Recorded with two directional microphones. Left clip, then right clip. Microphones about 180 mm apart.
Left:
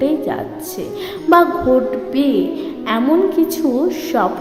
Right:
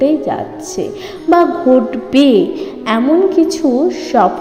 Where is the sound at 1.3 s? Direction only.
Centre (ahead or behind).